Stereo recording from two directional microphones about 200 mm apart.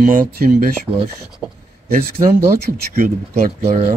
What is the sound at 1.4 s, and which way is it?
Speech, 5° right (ahead or behind).